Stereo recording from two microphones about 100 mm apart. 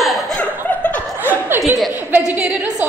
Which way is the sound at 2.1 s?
15° right (ahead or behind).